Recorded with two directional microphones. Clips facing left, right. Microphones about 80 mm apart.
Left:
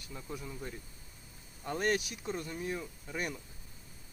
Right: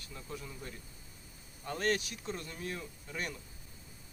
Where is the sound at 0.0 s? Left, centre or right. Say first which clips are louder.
Left 2 dB; centre.